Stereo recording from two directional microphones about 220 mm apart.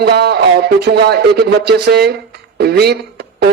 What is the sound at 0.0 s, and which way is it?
A man's voice, 45° right (ahead or behind).